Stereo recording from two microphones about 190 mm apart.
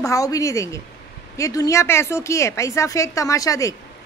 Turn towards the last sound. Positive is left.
turn(degrees=15)  # may be behind; listen again after turning